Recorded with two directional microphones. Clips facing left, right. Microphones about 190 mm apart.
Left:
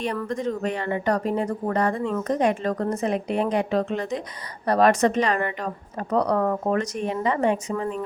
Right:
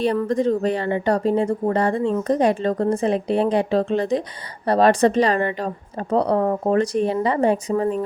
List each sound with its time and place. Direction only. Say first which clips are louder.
0.0 s a woman's voice: right 7 dB; 30° right (ahead or behind)